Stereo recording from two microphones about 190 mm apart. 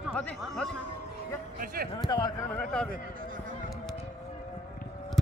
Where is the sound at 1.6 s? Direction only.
50° right (ahead or behind).